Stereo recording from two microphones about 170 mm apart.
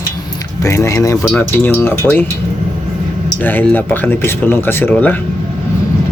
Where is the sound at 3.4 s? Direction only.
10° left (ahead or behind).